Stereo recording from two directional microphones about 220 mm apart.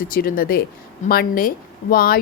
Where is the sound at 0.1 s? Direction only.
40° left (ahead or behind).